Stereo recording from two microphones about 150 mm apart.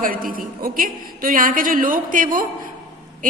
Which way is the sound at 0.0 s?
70° right (ahead or behind).